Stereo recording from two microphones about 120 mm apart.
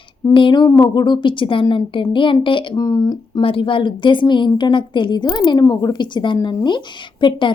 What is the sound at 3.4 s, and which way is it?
A woman's voice, 45° left (ahead or behind).